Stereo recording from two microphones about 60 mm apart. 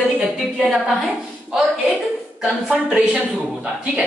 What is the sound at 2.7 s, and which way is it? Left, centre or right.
Speech, centre.